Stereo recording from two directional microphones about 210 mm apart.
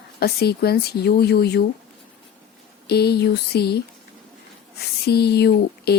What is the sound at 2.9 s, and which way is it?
Speech, 50° left (ahead or behind).